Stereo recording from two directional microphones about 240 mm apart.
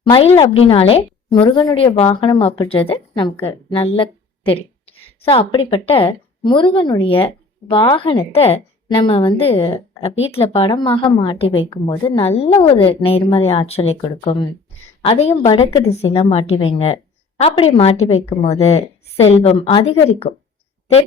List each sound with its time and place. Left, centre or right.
0.0 s a woman's voice: left
3.9 s a sound: left
5.2 s a woman's voice: left